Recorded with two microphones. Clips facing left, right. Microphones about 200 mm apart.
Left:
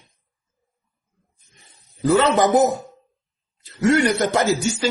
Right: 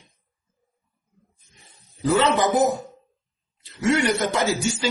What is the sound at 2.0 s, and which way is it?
Speech, 45° left (ahead or behind).